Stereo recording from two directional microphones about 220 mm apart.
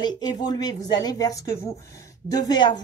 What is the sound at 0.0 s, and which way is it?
Speech, 20° left (ahead or behind).